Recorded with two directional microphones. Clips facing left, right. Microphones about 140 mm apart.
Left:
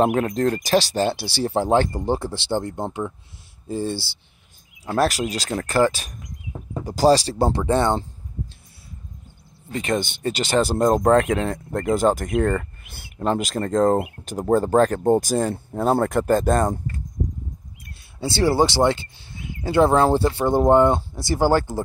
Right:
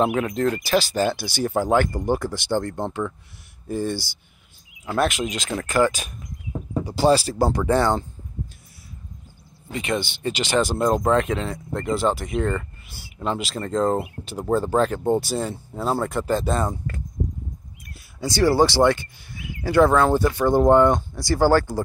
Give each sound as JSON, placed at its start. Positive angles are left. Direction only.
{"t": 0.0, "sound": "speech", "side_deg": 40}
{"t": 4.8, "sound": "speech", "side_deg": 35}
{"t": 9.7, "sound": "speech", "side_deg": 40}
{"t": 18.2, "sound": "speech", "side_deg": 25}